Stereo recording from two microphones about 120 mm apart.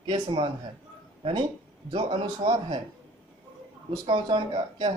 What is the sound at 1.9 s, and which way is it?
Speech, 40° right (ahead or behind).